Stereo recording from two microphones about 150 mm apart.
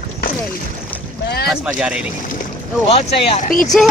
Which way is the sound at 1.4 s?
5° right (ahead or behind).